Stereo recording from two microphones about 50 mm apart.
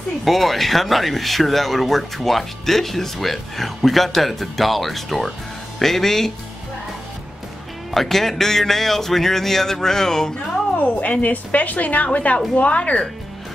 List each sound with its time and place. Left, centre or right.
0.2 s speech: centre
7.9 s speech: centre
10.8 s a woman's voice: left